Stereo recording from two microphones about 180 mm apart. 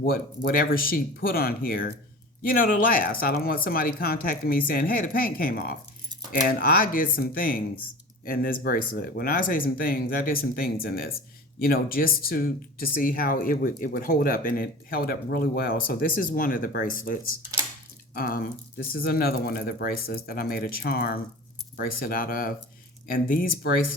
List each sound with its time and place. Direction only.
0.0 s speech: 55° left (ahead or behind)